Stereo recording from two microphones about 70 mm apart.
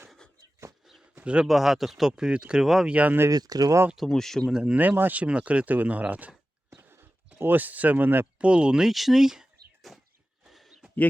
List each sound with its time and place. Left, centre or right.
1.2 s a man's voice: centre
1.5 s speech: centre
2.9 s speech: right
3.2 s speech: right
3.9 s speech: centre
4.5 s speech: centre
4.8 s speech: right
6.8 s a sound: right
7.3 s speech: right
8.4 s speech: centre
10.4 s a sound: centre